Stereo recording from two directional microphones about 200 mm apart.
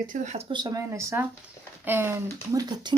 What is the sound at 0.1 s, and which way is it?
Speech, 40° right (ahead or behind).